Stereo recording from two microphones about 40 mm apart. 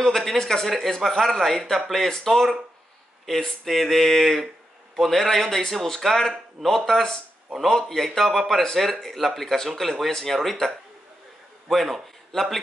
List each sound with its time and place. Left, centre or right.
0.0 s speech: centre
11.7 s speech: centre